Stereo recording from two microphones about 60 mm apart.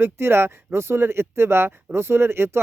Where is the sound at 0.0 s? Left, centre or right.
Right.